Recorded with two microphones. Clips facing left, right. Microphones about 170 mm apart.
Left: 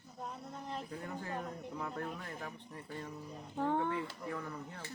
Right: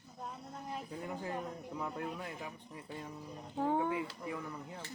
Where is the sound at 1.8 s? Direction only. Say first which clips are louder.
Right 2 dB; 15° right (ahead or behind).